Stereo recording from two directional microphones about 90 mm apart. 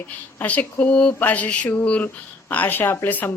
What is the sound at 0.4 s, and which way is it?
A woman's voice, 15° left (ahead or behind).